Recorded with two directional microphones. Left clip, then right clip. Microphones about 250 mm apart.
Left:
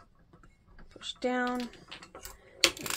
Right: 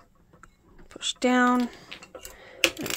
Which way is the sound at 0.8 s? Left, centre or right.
Right.